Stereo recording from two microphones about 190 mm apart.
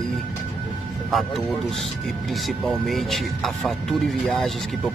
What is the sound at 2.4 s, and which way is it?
Speech, centre (ahead or behind).